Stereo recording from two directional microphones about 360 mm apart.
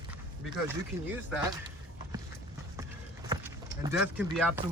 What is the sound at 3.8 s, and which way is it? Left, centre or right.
Speech, centre.